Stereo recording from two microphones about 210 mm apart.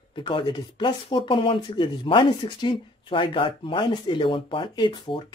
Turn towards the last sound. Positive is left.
turn(degrees=20)  # may be behind; listen again after turning